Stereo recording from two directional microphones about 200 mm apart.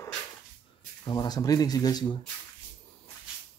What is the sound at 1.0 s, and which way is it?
Speech, 20° left (ahead or behind).